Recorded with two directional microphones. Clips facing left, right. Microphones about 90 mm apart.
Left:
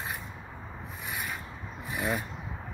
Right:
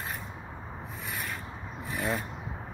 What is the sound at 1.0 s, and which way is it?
Rub, 5° left (ahead or behind).